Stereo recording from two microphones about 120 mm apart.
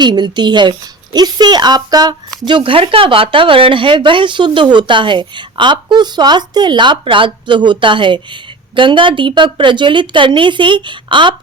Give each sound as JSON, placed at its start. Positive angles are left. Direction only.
{"t": 0.0, "sound": "a woman's voice", "side_deg": -40}
{"t": 2.5, "sound": "speech", "side_deg": -45}